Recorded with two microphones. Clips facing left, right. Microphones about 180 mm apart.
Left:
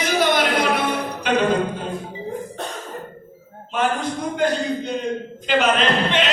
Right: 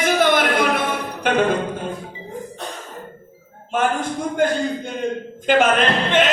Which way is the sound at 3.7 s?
50° right (ahead or behind).